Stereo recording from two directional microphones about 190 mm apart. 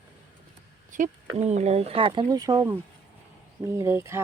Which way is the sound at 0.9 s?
45° right (ahead or behind).